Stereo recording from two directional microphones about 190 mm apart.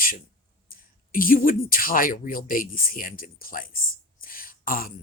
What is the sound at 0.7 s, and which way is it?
Speech, 50° left (ahead or behind).